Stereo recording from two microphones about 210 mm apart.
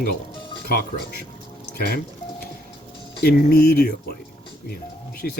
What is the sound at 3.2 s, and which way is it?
Speech, 50° left (ahead or behind).